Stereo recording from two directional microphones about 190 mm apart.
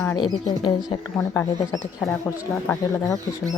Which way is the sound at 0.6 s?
25° left (ahead or behind).